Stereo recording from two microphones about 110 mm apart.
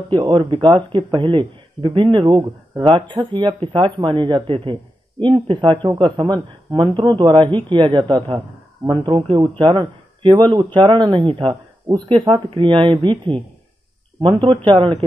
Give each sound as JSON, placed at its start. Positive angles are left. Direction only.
{"t": 0.1, "sound": "speech", "side_deg": -50}